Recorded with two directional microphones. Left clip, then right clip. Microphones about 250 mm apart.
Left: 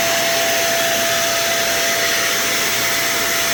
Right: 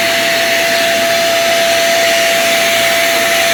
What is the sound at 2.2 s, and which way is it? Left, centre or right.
Vacuum cleaner, centre.